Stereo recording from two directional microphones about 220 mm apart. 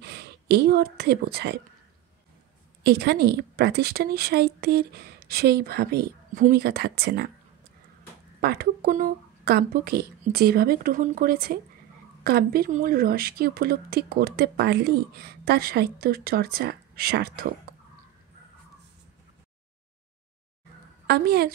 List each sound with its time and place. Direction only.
0.0 s speech: 50° right (ahead or behind)
2.8 s speech: 45° right (ahead or behind)
8.4 s speech: 45° right (ahead or behind)
21.1 s speech: 45° right (ahead or behind)